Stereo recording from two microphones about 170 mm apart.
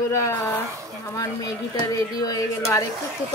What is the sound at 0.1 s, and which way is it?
Speech, 15° left (ahead or behind).